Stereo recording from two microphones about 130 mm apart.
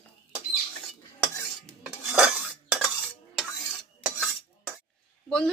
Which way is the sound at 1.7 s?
5° right (ahead or behind).